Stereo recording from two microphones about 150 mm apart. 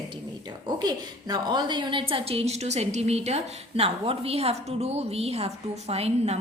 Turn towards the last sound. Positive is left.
turn(degrees=-45)  # may be behind; listen again after turning